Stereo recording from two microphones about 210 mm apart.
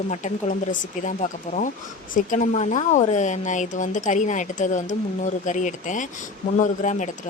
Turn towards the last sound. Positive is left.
turn(degrees=35)  # may be behind; listen again after turning